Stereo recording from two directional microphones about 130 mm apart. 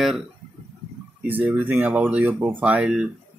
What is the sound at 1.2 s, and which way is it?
Speech, 15° right (ahead or behind).